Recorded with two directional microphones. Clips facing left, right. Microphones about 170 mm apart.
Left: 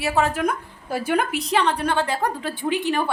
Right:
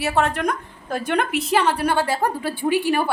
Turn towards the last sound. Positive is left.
turn(degrees=-5)  # may be behind; listen again after turning